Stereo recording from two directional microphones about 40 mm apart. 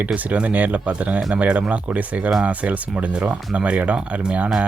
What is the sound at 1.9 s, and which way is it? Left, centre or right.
Speech, right.